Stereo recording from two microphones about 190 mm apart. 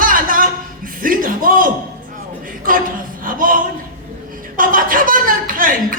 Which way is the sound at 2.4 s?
45° right (ahead or behind).